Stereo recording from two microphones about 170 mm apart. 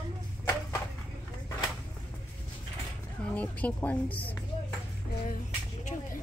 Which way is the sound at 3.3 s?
10° left (ahead or behind).